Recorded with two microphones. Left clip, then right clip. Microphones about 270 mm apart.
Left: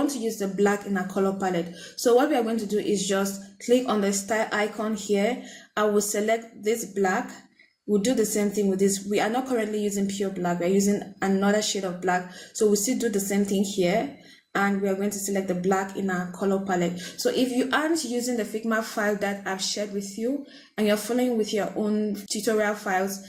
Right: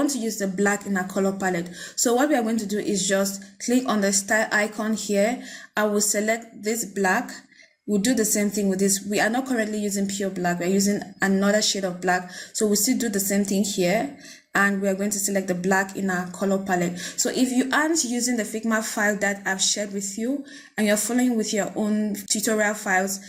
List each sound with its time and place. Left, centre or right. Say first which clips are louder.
0.0 s a woman's voice: right 2 dB; right